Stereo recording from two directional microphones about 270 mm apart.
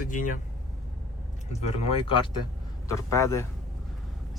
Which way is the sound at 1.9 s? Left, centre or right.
Centre.